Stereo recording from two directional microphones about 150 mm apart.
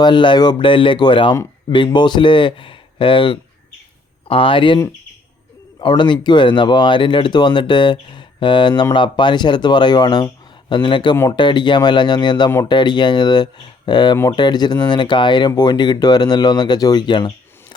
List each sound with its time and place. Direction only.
0.0 s speech: 30° left (ahead or behind)
5.8 s speech: 30° left (ahead or behind)